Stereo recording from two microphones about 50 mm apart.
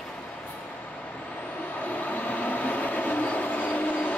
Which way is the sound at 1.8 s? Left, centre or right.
Left.